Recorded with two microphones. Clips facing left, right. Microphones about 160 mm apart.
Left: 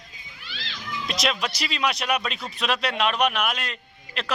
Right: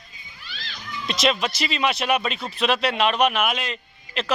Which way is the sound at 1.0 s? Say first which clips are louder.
Right 4 dB; centre (ahead or behind).